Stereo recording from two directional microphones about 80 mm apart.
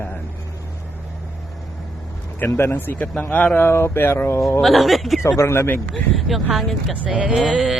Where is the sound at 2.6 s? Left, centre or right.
Left.